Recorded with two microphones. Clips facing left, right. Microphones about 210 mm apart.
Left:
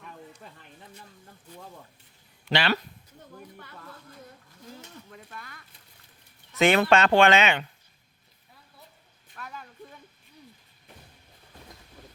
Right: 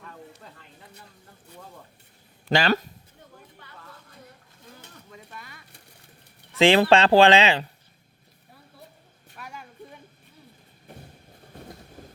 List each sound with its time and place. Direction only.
2.4 s speech: 45° right (ahead or behind)
5.1 s speech: centre (ahead or behind)
6.6 s speech: 30° right (ahead or behind)
9.3 s a sound: 10° right (ahead or behind)
11.5 s vehicle: 45° right (ahead or behind)